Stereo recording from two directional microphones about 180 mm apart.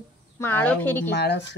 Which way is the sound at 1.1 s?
65° left (ahead or behind).